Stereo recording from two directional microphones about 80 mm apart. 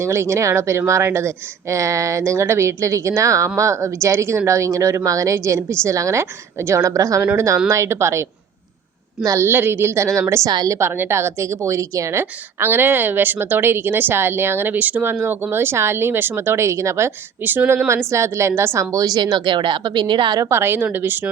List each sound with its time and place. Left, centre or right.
0.0 s speech: right
9.2 s a woman's voice: right
9.5 s a woman's voice: right
17.4 s a woman's voice: right
17.8 s a woman's voice: right
20.4 s a woman's voice: right